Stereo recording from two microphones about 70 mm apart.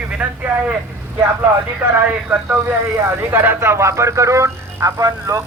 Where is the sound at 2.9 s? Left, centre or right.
Right.